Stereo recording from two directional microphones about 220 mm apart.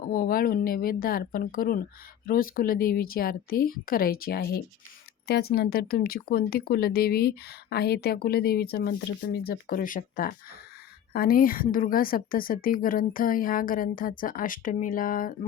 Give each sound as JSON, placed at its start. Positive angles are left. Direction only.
{"t": 0.0, "sound": "a woman's voice", "side_deg": 40}